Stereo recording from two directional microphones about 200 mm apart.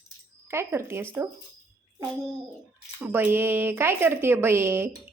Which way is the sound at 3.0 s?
10° right (ahead or behind).